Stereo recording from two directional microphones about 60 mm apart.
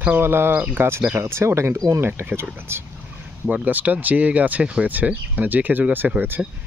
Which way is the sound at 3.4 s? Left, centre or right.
Right.